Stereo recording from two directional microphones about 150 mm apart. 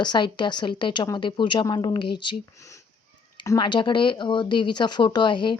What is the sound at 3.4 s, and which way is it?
Speech, 25° left (ahead or behind).